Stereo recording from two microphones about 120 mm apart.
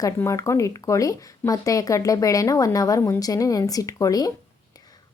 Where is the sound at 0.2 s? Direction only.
25° left (ahead or behind).